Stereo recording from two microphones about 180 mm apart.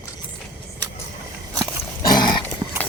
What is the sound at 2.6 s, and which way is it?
Dog, 20° right (ahead or behind).